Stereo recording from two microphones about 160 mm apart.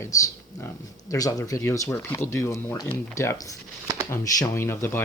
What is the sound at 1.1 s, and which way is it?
Speech, 20° left (ahead or behind).